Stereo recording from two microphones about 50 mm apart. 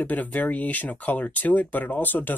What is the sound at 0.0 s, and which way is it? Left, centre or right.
Speech, left.